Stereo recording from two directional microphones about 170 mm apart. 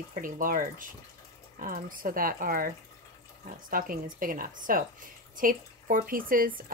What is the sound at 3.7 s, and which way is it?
Speech, 55° right (ahead or behind).